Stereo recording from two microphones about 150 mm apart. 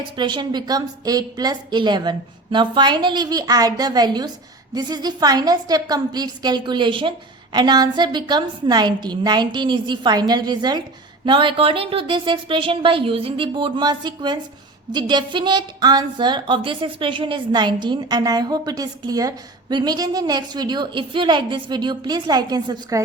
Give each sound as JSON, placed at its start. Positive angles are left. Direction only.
{"t": 0.0, "sound": "a woman's voice", "side_deg": -30}